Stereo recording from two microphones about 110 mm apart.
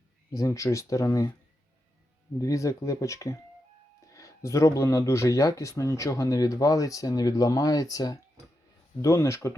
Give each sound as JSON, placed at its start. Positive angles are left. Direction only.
{"t": 0.3, "sound": "speech", "side_deg": 30}
{"t": 2.4, "sound": "speech", "side_deg": 30}